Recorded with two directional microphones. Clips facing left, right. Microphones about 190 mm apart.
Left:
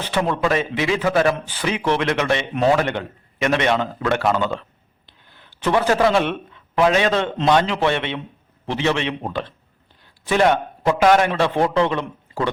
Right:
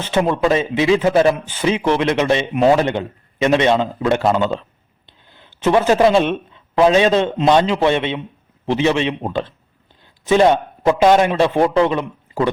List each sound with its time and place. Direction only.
0.0 s a man's voice: 20° right (ahead or behind)